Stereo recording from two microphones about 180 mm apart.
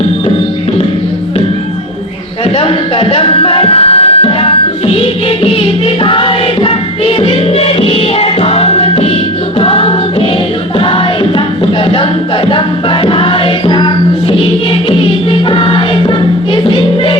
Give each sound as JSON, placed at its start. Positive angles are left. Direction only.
{"t": 2.6, "sound": "music", "side_deg": 30}